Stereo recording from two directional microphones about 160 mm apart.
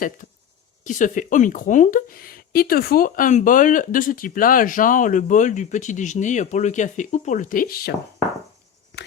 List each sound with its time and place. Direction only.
0.9 s speech: 55° left (ahead or behind); by 7.9 s 70° left (ahead or behind)